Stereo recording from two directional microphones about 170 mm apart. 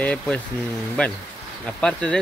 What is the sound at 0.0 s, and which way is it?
Speech, 10° left (ahead or behind).